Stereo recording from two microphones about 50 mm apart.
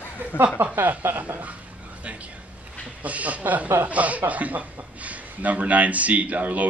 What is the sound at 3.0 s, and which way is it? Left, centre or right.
A man's voice, right.